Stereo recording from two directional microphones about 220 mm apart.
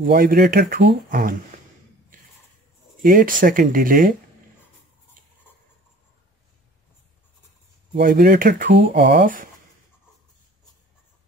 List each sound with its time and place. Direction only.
0.0 s speech: 40° right (ahead or behind)
3.0 s speech: 40° right (ahead or behind)
7.9 s speech: 40° right (ahead or behind)